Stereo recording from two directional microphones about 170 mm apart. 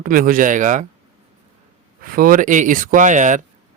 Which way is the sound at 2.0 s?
55° right (ahead or behind).